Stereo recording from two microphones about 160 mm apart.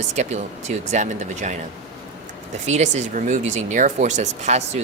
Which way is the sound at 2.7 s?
45° right (ahead or behind).